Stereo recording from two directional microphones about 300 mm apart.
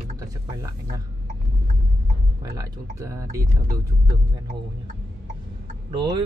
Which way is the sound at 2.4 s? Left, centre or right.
Centre.